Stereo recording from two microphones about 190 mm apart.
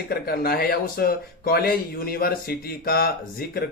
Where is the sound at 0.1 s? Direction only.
55° left (ahead or behind).